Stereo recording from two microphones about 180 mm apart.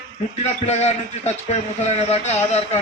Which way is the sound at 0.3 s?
40° left (ahead or behind).